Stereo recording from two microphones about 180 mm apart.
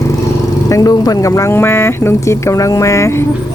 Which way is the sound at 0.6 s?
20° left (ahead or behind).